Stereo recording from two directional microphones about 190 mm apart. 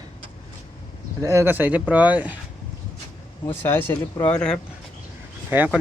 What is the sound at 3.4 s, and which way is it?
Speech, 10° left (ahead or behind).